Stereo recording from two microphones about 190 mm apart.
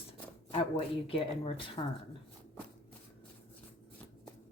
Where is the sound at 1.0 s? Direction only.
30° left (ahead or behind).